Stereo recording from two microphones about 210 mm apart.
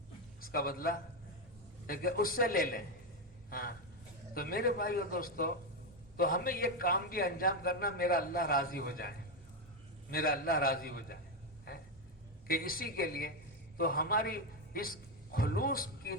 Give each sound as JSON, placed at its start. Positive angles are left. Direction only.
{"t": 0.4, "sound": "a man's voice", "side_deg": 45}
{"t": 12.5, "sound": "a man's voice", "side_deg": 45}